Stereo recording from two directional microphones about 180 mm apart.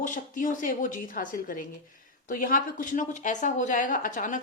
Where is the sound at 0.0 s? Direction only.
45° left (ahead or behind).